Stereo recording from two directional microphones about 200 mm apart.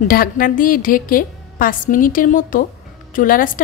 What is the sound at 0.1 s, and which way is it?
A woman's voice, 45° left (ahead or behind).